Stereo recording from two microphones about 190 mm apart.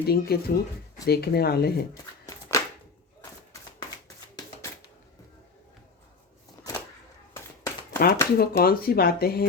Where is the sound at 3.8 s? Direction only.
20° left (ahead or behind).